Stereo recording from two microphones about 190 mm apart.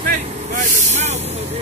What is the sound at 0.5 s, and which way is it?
Speech, 40° right (ahead or behind).